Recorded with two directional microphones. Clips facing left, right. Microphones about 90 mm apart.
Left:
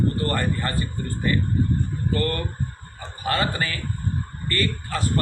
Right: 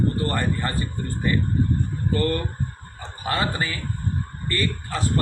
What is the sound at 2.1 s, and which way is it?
A man's voice, 20° right (ahead or behind).